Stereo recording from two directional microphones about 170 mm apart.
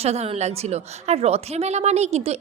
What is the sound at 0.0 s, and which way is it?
A woman's voice, 40° right (ahead or behind).